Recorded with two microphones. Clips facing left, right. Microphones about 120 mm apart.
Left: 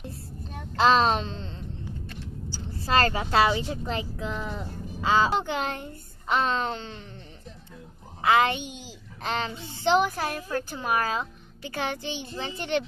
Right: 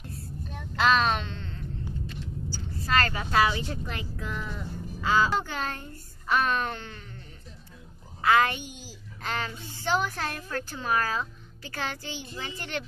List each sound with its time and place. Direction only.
0.7 s a child's voice: 30° left (ahead or behind)
8.2 s a child's voice: 20° left (ahead or behind)